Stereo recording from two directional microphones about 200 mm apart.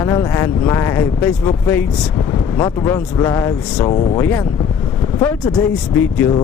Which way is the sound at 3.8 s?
30° left (ahead or behind).